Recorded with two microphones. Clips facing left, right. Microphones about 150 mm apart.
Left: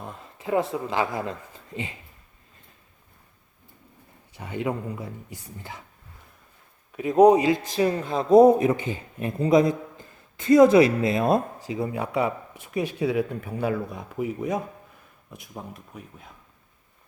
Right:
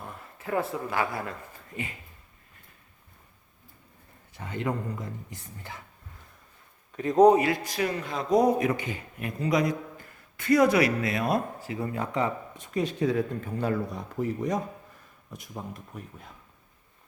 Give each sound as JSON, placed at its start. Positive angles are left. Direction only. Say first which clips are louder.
{"t": 0.0, "sound": "speech", "louder": "left 4 dB", "side_deg": 20}
{"t": 4.4, "sound": "speech", "louder": "left 2 dB", "side_deg": 15}
{"t": 6.9, "sound": "speech", "louder": "left 2 dB", "side_deg": 10}
{"t": 7.7, "sound": "speech", "louder": "left 6 dB", "side_deg": 30}